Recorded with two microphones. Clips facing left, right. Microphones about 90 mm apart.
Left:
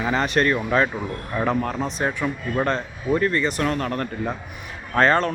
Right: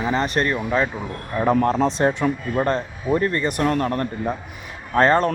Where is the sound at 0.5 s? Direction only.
10° right (ahead or behind).